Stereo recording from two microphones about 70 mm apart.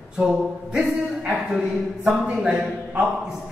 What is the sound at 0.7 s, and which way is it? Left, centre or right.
Speech, centre.